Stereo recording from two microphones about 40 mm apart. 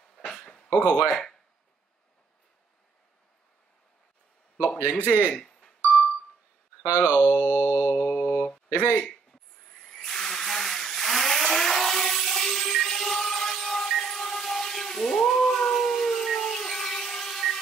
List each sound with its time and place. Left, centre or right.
0.3 s a sound: centre
0.7 s speech: right
4.7 s mantra: right
5.3 s music: centre
6.8 s mantra: right
8.6 s speech: right
9.8 s a sound: centre
15.2 s howl: centre